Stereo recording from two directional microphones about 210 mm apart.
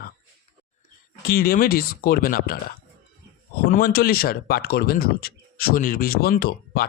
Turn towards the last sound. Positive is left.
turn(degrees=45)  # may be behind; listen again after turning